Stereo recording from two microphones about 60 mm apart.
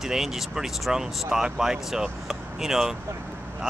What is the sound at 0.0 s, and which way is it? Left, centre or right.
Speech, centre.